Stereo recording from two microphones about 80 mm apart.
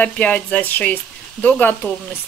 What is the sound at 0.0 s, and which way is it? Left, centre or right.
Speech, centre.